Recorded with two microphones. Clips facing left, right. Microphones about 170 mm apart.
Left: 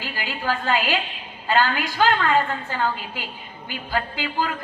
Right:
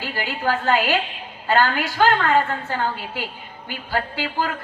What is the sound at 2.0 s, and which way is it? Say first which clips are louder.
A woman's voice: right 2 dB; 50° right (ahead or behind).